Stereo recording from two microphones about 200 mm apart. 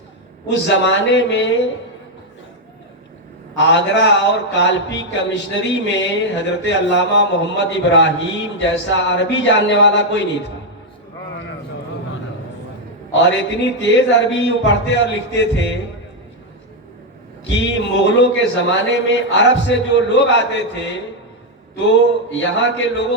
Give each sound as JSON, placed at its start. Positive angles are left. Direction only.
{"t": 0.4, "sound": "speech", "side_deg": 65}
{"t": 3.6, "sound": "speech", "side_deg": 65}
{"t": 13.2, "sound": "speech", "side_deg": 65}
{"t": 17.4, "sound": "speech", "side_deg": 65}